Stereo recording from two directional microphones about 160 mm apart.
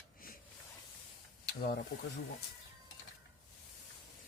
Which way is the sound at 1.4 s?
80° left.